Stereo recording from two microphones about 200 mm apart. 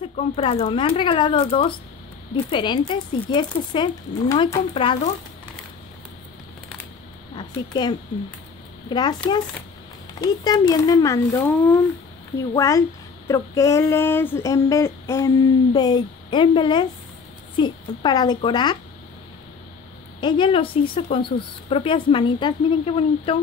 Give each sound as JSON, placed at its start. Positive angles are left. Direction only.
{"t": 0.4, "sound": "a woman's voice", "side_deg": 30}
{"t": 7.3, "sound": "speech", "side_deg": 25}
{"t": 10.2, "sound": "child singing", "side_deg": 20}
{"t": 17.6, "sound": "a woman's voice", "side_deg": 20}
{"t": 20.2, "sound": "a woman's voice", "side_deg": 25}